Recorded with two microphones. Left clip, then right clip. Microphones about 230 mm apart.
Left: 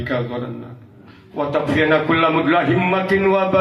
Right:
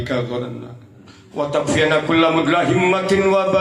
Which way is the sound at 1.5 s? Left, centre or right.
Right.